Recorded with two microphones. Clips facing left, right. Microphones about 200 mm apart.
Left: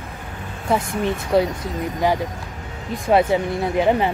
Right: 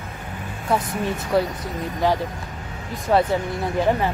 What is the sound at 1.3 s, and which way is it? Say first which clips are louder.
Speech: left 3 dB; 25° left (ahead or behind).